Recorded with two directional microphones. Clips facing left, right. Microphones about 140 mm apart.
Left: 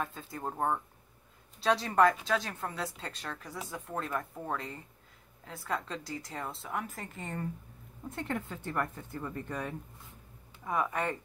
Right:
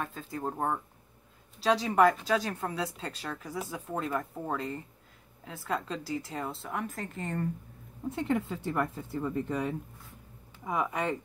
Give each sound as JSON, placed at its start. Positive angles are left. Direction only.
{"t": 0.0, "sound": "speech", "side_deg": 0}